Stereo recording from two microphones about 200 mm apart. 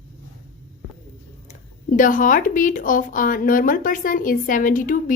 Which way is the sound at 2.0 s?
40° left (ahead or behind).